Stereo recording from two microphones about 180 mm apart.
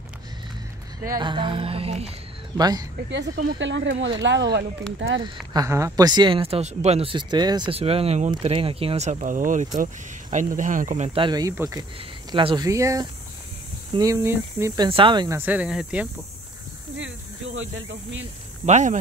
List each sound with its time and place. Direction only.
1.0 s speech: 25° right (ahead or behind)
2.5 s speech: 20° right (ahead or behind)
3.5 s speech: 90° right
4.9 s speech: 90° right
5.2 s speech: 20° right (ahead or behind); by 11.1 s 45° right (ahead or behind)
11.1 s speech: 25° right (ahead or behind)
14.9 s speech: 30° right (ahead or behind); by 16.1 s 5° right (ahead or behind)
18.7 s speech: 40° right (ahead or behind)